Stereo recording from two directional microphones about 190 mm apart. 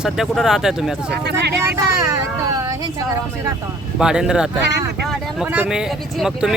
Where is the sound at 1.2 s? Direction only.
60° right (ahead or behind).